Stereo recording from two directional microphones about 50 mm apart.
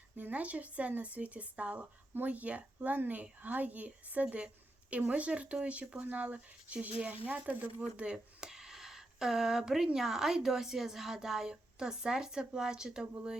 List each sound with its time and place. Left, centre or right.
0.2 s speech: right; by 13.1 s centre